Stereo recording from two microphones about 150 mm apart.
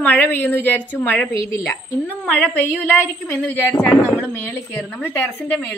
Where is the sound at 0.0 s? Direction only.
10° left (ahead or behind).